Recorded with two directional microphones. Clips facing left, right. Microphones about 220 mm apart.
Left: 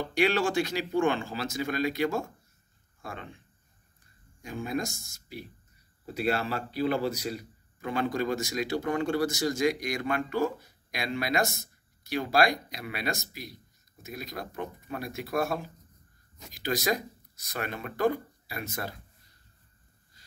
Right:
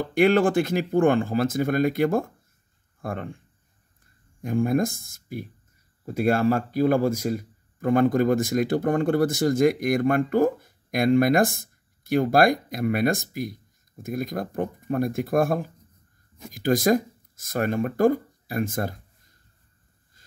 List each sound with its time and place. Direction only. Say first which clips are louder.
0.0 s a man's voice: right 7 dB; 50° right (ahead or behind)
4.4 s a man's voice: right 10 dB; 50° right (ahead or behind)
20.2 s a sound: right 2 dB; 50° right (ahead or behind)